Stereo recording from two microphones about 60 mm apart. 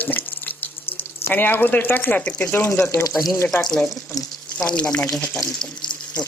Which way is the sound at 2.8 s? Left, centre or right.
Left.